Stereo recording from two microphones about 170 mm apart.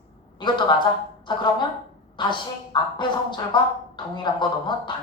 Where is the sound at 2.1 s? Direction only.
25° left (ahead or behind).